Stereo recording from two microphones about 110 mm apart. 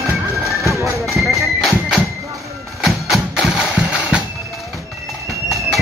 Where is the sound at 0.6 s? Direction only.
30° right (ahead or behind).